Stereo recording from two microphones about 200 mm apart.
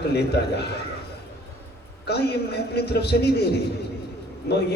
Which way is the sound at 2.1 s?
55° left (ahead or behind).